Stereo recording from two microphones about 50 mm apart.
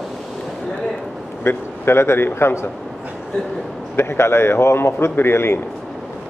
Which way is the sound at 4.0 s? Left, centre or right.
Left.